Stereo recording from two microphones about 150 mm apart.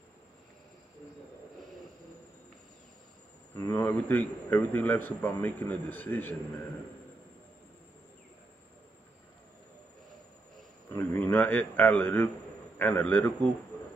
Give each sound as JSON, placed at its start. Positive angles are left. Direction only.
{"t": 3.5, "sound": "a man's voice", "side_deg": 15}
{"t": 10.9, "sound": "a man's voice", "side_deg": 15}